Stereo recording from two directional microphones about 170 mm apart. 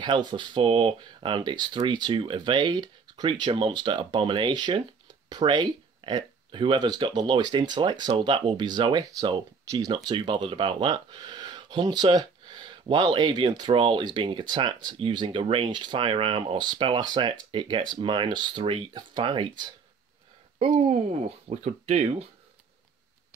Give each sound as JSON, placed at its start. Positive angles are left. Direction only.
{"t": 0.0, "sound": "speech", "side_deg": -25}
{"t": 20.7, "sound": "speech", "side_deg": -40}